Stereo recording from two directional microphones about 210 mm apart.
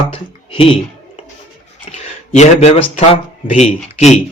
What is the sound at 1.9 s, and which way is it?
Speech, 30° left (ahead or behind).